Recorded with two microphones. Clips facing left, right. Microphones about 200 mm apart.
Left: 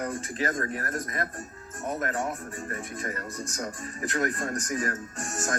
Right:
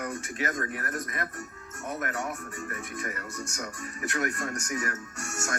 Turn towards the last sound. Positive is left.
turn(degrees=30)  # may be behind; listen again after turning